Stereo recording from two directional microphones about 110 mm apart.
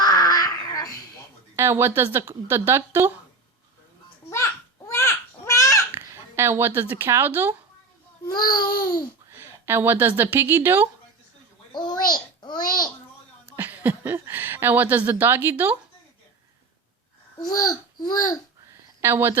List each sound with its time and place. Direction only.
0.0 s a sound: 35° left (ahead or behind)
1.5 s a woman's voice: 25° right (ahead or behind)
4.3 s babbling: 25° left (ahead or behind)
5.9 s speech: 25° right (ahead or behind)
8.3 s babbling: 40° left (ahead or behind)
9.3 s a sound: 20° right (ahead or behind)
10.3 s a woman's voice: 15° right (ahead or behind)
11.7 s babbling: 40° left (ahead or behind)
13.6 s speech: 15° right (ahead or behind)
17.4 s babbling: 35° left (ahead or behind)
19.0 s a woman's voice: 20° right (ahead or behind)